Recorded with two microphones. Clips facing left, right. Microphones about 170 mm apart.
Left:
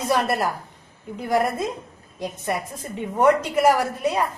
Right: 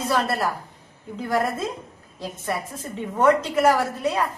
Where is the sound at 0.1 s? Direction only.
15° left (ahead or behind).